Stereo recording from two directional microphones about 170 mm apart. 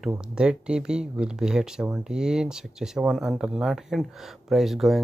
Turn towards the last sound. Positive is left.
turn(degrees=0)  # may be behind; listen again after turning